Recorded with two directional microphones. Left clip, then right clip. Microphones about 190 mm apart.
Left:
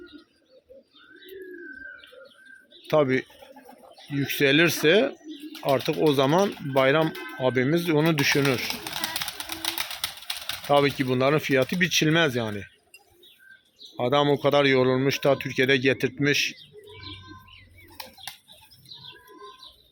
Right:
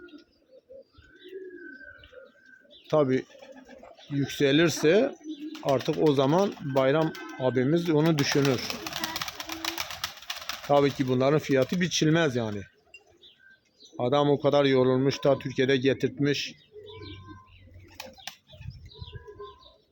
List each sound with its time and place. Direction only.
2.8 s speech: centre (ahead or behind)
8.8 s a sound: 25° right (ahead or behind)
10.7 s speech: 5° right (ahead or behind)
13.9 s speech: centre (ahead or behind)